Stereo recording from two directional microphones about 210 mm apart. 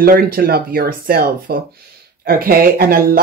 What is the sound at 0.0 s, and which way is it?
Speech, 45° right (ahead or behind).